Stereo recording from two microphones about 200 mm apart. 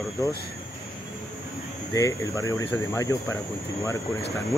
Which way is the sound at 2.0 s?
15° left (ahead or behind).